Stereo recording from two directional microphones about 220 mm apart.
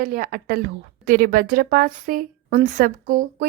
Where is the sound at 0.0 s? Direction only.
40° right (ahead or behind).